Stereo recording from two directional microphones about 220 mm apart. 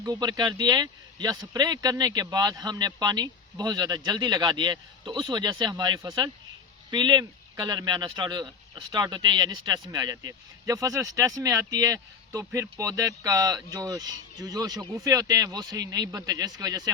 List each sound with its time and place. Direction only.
0.0 s speech: 20° right (ahead or behind)